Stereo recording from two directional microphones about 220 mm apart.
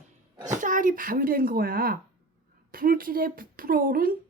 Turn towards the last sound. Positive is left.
turn(degrees=-40)  # may be behind; listen again after turning